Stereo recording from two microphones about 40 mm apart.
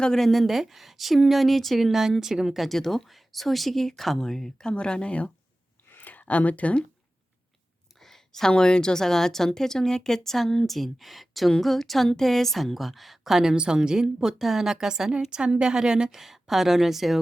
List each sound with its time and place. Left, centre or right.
0.2 s speech: centre
2.6 s a woman's voice: centre; by 5.3 s left
5.9 s a sound: left
6.2 s speech: left
7.9 s a woman's voice: centre
16.1 s a woman's voice: centre